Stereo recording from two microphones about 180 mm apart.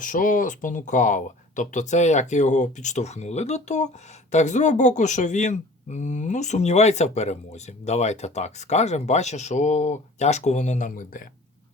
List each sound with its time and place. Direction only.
0.0 s speech: 45° left (ahead or behind)